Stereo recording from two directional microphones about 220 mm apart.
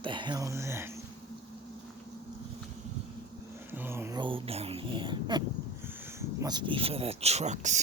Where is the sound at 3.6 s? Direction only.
10° right (ahead or behind).